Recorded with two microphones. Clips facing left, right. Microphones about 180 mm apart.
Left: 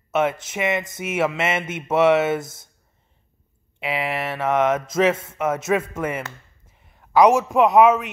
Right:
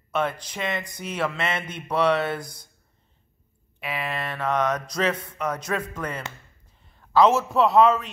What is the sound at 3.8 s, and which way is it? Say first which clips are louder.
A man's voice: left 5 dB; 20° left (ahead or behind).